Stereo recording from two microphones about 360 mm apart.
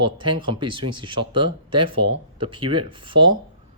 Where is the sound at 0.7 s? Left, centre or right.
Right.